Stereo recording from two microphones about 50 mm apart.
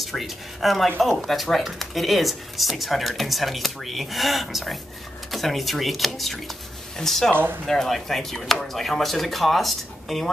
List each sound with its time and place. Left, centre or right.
0.0 s speech: centre